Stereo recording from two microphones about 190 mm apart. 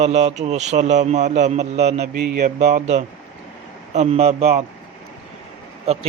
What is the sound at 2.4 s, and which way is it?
A man's voice, 40° right (ahead or behind).